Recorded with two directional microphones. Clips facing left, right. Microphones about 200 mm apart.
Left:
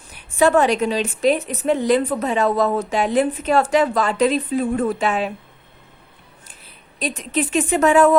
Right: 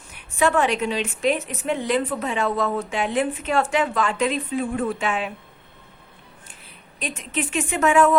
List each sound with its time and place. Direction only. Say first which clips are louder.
0.3 s a woman's voice: left 5 dB; 35° left (ahead or behind)
7.0 s a woman's voice: left 5 dB; 35° left (ahead or behind)